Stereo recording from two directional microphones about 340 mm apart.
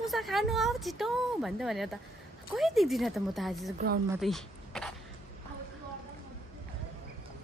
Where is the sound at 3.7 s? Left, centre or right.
Right.